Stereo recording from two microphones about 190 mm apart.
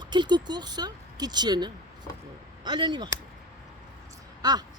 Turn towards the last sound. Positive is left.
turn(degrees=-20)  # may be behind; listen again after turning